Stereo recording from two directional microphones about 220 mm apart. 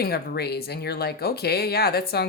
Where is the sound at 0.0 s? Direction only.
45° left (ahead or behind).